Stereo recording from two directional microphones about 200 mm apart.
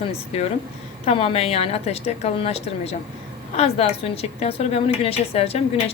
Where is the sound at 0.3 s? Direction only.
30° left (ahead or behind).